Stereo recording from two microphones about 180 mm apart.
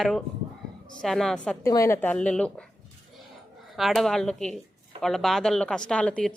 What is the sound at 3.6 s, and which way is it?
A woman's voice, centre (ahead or behind).